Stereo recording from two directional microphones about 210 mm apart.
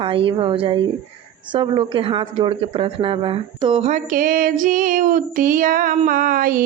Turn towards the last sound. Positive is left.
turn(degrees=-45)  # may be behind; listen again after turning